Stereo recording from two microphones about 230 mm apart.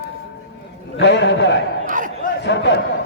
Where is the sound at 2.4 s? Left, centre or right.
Left.